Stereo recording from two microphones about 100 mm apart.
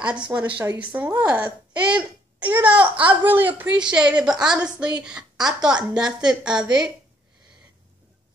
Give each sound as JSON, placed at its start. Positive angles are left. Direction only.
{"t": 0.0, "sound": "a woman's voice", "side_deg": -10}